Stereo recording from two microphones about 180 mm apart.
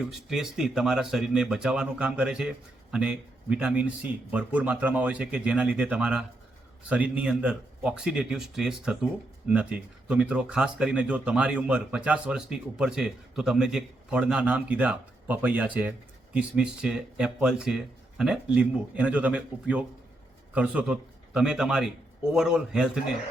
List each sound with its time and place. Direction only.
0.0 s a man's voice: centre (ahead or behind)